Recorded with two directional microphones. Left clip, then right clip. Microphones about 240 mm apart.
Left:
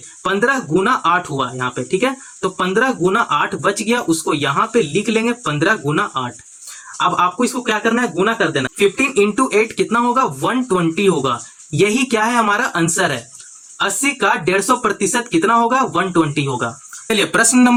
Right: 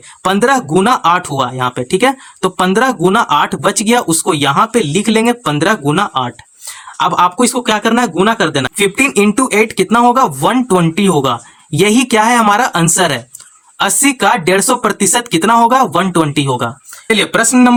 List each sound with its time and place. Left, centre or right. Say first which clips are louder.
0.2 s speech: right 5 dB; right
17.1 s speech: right 3 dB; right